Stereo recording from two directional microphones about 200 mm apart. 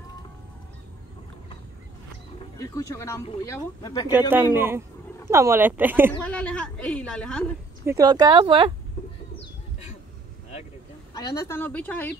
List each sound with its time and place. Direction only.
2.6 s a woman's voice: 15° left (ahead or behind)
4.1 s speech: 10° right (ahead or behind)
6.2 s a woman's voice: 5° left (ahead or behind)
7.8 s speech: 15° right (ahead or behind)
11.1 s a woman's voice: 15° left (ahead or behind)